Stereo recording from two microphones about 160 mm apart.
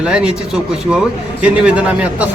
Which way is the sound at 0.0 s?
5° right (ahead or behind).